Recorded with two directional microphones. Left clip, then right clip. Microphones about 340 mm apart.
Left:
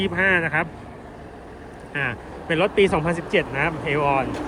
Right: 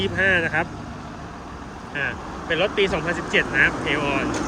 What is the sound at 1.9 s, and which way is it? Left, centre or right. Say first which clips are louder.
Speech: even; centre.